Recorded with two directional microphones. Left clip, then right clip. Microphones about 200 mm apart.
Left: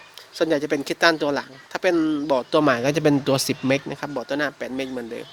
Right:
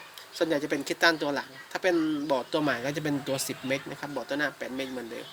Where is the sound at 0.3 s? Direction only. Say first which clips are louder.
Left 6 dB; 45° left (ahead or behind).